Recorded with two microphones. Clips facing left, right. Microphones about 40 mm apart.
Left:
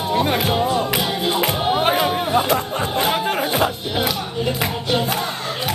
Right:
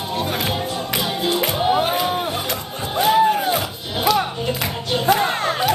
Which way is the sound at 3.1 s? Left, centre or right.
Left.